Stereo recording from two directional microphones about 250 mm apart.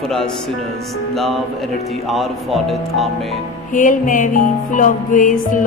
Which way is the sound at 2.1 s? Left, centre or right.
Centre.